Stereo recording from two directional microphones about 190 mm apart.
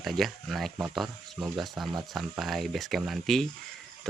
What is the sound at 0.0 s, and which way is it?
Speech, centre (ahead or behind).